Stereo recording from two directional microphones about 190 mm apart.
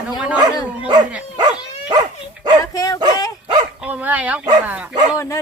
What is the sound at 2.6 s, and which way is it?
Speech, 20° left (ahead or behind).